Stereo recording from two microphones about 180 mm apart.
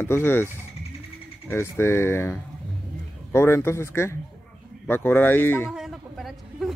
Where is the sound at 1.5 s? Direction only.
15° left (ahead or behind).